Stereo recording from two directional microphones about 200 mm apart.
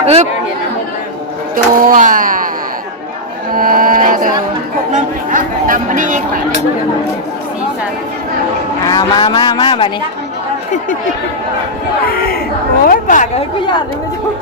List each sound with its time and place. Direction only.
0.0 s speech: 35° right (ahead or behind)
1.5 s speech: 40° right (ahead or behind)
3.5 s music: 45° right (ahead or behind)
4.9 s speech: 40° right (ahead or behind)
8.8 s a man's voice: 20° left (ahead or behind)
12.9 s speech: 40° left (ahead or behind)